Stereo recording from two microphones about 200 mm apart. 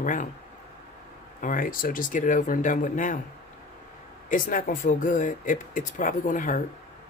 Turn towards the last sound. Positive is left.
turn(degrees=40)  # may be behind; listen again after turning